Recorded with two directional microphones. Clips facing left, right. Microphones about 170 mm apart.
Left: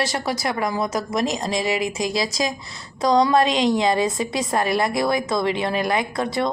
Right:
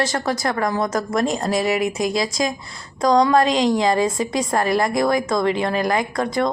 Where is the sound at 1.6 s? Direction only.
25° left (ahead or behind).